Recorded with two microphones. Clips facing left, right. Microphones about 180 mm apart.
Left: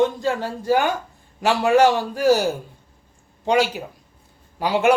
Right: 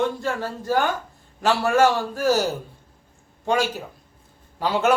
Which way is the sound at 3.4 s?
15° left (ahead or behind).